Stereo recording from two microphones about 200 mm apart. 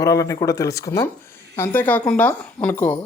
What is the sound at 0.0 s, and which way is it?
A woman's voice, 15° left (ahead or behind).